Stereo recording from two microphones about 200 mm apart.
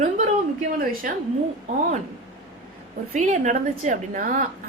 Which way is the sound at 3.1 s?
35° right (ahead or behind).